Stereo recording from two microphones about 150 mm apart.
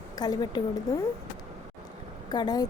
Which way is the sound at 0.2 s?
25° left (ahead or behind).